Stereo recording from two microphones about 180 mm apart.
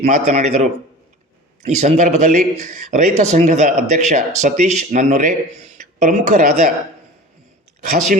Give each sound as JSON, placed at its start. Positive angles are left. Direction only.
{"t": 0.0, "sound": "speech", "side_deg": -40}